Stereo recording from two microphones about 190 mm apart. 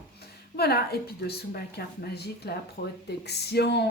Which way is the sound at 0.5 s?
55° left (ahead or behind).